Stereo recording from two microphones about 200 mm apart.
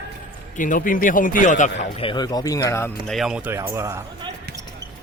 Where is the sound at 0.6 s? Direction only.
40° left (ahead or behind); by 2.9 s 15° left (ahead or behind).